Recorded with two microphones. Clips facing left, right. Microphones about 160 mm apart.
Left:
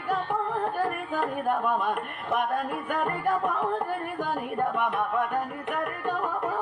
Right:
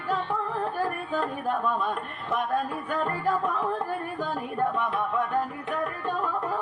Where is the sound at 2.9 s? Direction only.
20° left (ahead or behind).